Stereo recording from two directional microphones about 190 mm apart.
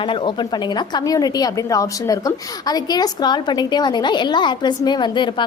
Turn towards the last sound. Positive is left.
turn(degrees=25)  # may be behind; listen again after turning